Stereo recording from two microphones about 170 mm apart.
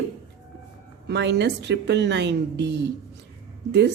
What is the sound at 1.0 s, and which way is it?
A woman's voice, 80° right.